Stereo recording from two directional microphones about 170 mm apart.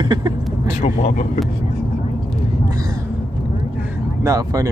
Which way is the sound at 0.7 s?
40° left (ahead or behind).